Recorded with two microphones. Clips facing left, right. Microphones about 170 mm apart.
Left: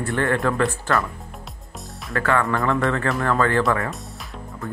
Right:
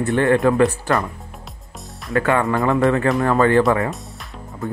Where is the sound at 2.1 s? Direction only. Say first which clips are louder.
Right 3 dB; 20° right (ahead or behind).